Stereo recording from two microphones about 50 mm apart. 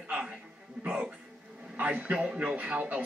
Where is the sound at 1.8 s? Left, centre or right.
Right.